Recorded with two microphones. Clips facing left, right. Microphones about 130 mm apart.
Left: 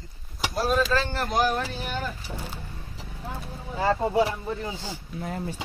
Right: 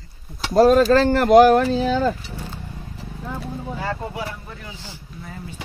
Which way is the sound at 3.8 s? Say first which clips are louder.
Left 9 dB; 30° left (ahead or behind).